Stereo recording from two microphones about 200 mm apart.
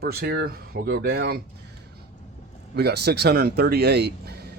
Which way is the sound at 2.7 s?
55° right (ahead or behind).